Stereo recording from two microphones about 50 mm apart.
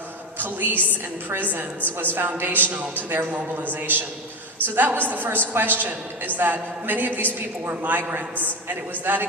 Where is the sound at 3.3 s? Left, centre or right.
Right.